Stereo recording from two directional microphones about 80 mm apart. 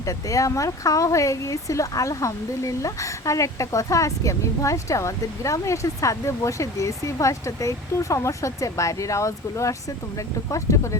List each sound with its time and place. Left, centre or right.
0.0 s speech: left